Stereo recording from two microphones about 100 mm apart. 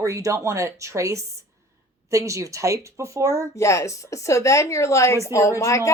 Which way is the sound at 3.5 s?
30° left (ahead or behind).